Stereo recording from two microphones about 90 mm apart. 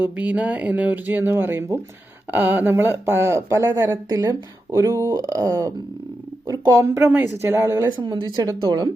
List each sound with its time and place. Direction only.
0.0 s speech: 15° right (ahead or behind); by 7.9 s 30° right (ahead or behind)
7.9 s speech: 55° right (ahead or behind)
8.4 s speech: 45° right (ahead or behind)